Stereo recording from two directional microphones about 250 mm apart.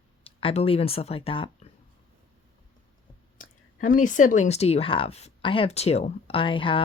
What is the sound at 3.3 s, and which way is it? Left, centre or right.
Speech, left.